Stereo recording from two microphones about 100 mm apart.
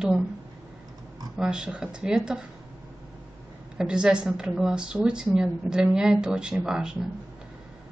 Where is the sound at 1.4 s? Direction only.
5° right (ahead or behind).